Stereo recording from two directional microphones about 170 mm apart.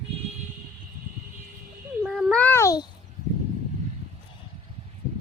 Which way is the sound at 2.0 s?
Centre (ahead or behind).